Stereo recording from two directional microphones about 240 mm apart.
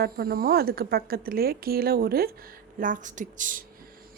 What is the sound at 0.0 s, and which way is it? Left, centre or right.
A woman's voice, right.